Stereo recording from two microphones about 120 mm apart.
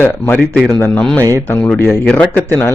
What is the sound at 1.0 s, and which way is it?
A man's voice, 5° left (ahead or behind).